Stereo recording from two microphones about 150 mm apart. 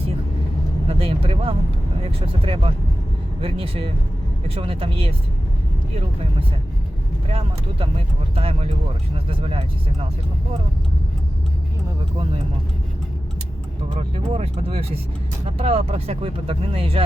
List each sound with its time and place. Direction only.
0.9 s vehicle: 40° right (ahead or behind)
2.0 s speech: 40° right (ahead or behind)
7.3 s speech: 40° right (ahead or behind)
13.9 s speech: 40° right (ahead or behind)